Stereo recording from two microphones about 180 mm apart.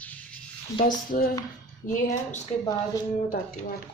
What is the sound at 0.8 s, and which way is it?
Speech, 50° left (ahead or behind).